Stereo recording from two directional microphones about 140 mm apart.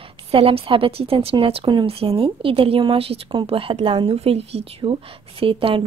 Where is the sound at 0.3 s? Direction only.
40° right (ahead or behind).